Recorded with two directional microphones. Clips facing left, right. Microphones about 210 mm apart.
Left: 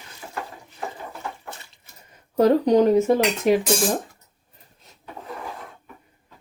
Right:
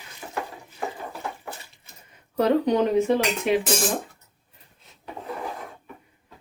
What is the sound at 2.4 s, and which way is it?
Speech, 40° left (ahead or behind).